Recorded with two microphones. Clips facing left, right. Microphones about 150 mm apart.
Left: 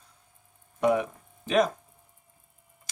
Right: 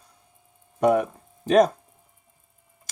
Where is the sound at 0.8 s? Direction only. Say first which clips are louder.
Right 4 dB; 50° right (ahead or behind).